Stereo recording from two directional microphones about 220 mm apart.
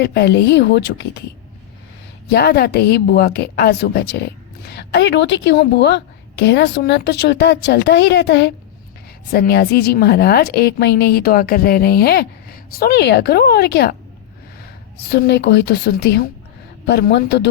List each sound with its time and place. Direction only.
0.0 s a woman's voice: 50° left (ahead or behind)
2.3 s a woman's voice: 45° left (ahead or behind)
15.1 s a woman's voice: 50° left (ahead or behind)